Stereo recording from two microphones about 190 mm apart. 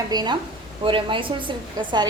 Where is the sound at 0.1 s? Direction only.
20° right (ahead or behind).